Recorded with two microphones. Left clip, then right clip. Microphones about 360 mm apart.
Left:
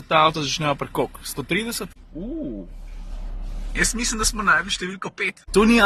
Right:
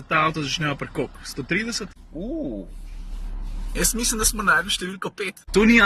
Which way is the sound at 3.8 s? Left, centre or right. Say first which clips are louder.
Right 1 dB; centre.